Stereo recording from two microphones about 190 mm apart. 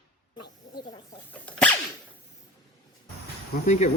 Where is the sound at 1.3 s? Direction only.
5° left (ahead or behind).